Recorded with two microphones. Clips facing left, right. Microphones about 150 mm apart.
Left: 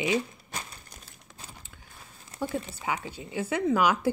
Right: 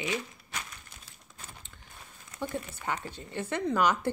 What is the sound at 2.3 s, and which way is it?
Speech, 10° left (ahead or behind).